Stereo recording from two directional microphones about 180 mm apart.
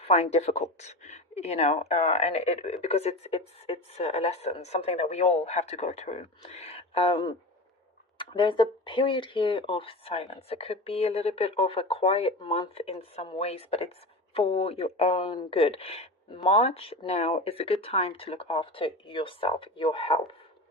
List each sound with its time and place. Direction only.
0.0 s speech: 35° left (ahead or behind)